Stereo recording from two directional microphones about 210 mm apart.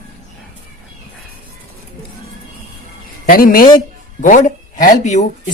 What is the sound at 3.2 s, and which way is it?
A woman's voice, 40° left (ahead or behind).